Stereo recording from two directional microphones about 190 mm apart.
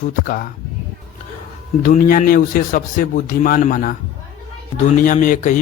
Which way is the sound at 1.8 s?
45° left (ahead or behind).